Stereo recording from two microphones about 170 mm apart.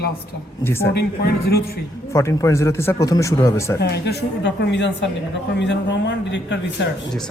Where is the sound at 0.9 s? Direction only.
70° left (ahead or behind).